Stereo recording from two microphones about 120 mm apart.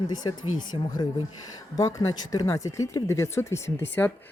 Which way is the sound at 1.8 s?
25° left (ahead or behind).